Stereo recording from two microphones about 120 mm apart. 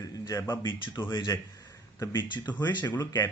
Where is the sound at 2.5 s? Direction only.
15° left (ahead or behind).